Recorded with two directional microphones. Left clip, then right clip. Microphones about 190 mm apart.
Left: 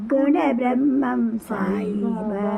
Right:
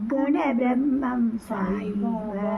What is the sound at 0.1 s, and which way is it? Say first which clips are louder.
A woman's voice: left 5 dB; 45° left (ahead or behind).